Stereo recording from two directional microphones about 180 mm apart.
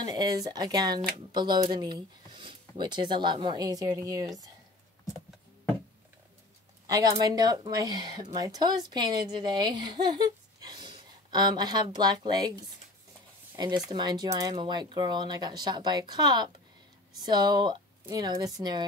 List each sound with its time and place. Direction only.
0.0 s speech: 20° right (ahead or behind)
6.9 s speech: 20° right (ahead or behind)
13.8 s speech: 25° right (ahead or behind)